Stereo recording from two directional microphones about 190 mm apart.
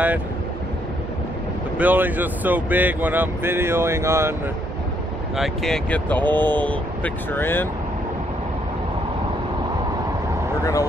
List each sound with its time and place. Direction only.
1.8 s speech: 10° right (ahead or behind)
5.3 s speech: centre (ahead or behind)
10.6 s speech: 15° left (ahead or behind)